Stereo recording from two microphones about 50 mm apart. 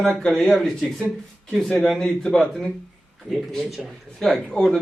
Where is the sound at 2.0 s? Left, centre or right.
Centre.